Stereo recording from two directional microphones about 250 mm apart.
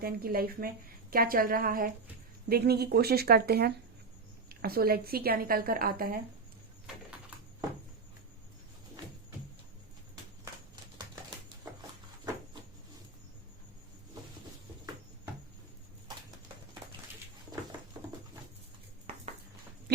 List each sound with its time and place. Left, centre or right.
0.0 s a woman's voice: right
10.9 s typewriter: centre